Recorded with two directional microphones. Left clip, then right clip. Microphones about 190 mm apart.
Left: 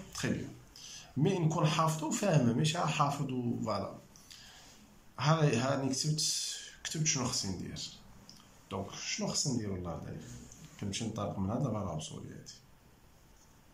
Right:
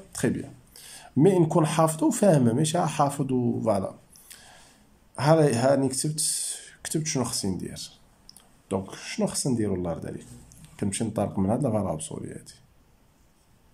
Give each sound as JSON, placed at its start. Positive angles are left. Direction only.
{"t": 0.1, "sound": "a sound", "side_deg": -40}
{"t": 0.7, "sound": "speech", "side_deg": -45}
{"t": 5.1, "sound": "speech", "side_deg": -40}